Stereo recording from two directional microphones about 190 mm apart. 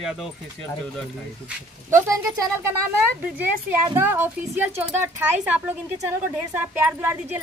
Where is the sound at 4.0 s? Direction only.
10° right (ahead or behind).